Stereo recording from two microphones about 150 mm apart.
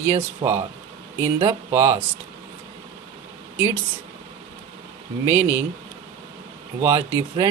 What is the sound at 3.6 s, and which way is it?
Speech, 15° right (ahead or behind).